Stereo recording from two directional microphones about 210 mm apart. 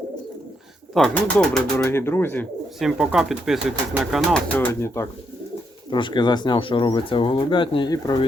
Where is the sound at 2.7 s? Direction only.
Centre (ahead or behind).